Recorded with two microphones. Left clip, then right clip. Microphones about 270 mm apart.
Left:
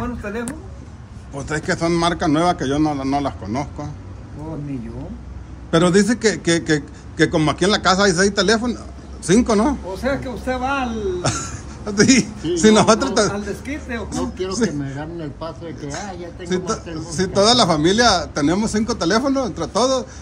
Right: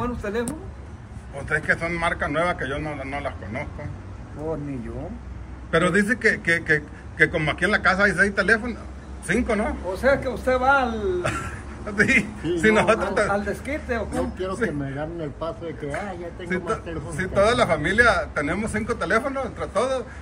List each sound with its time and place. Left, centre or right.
0.0 s speech: centre
1.4 s a man's voice: centre
5.7 s a man's voice: centre
9.8 s speech: centre
11.9 s a man's voice: centre
13.3 s speech: centre
14.1 s a man's voice: centre